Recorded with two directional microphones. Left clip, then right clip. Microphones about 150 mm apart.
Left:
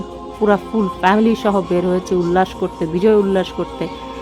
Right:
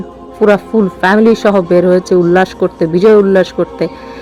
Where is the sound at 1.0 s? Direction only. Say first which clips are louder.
Right 6 dB; 25° right (ahead or behind).